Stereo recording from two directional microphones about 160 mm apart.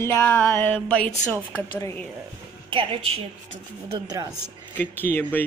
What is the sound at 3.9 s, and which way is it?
Speech, 25° right (ahead or behind).